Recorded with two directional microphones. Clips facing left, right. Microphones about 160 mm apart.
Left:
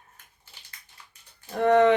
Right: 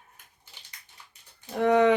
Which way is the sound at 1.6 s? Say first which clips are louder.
Left 2 dB; 10° right (ahead or behind).